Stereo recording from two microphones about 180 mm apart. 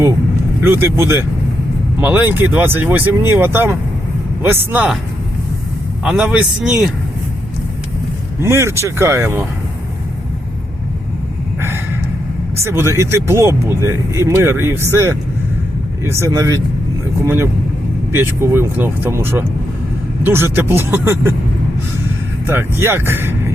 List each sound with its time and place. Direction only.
0.6 s speech: 15° right (ahead or behind)
6.1 s speech: 5° right (ahead or behind)
8.4 s speech: 15° right (ahead or behind)
12.6 s speech: 15° right (ahead or behind)
22.4 s speech: 15° right (ahead or behind)